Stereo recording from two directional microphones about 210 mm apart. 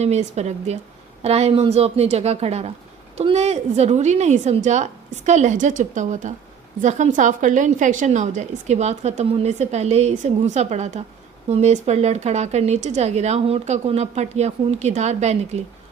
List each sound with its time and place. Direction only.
0.0 s a woman's voice: 30° right (ahead or behind)